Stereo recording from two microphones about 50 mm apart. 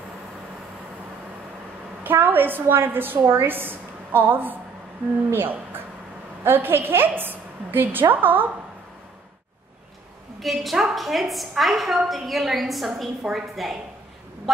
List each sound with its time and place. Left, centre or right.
2.0 s a woman's voice: right
10.4 s a woman's voice: centre